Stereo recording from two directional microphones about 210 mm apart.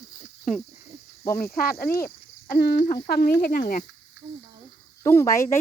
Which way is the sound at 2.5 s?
45° left (ahead or behind).